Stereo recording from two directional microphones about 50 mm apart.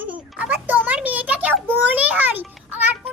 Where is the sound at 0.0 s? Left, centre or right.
Right.